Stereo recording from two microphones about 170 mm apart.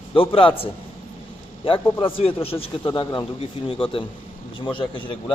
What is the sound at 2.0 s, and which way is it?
A man's voice, 35° left (ahead or behind).